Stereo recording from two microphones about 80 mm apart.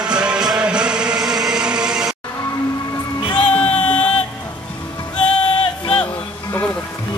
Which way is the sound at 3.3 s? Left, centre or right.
Centre.